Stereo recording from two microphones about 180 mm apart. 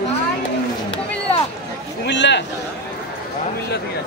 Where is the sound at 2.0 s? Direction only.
80° left.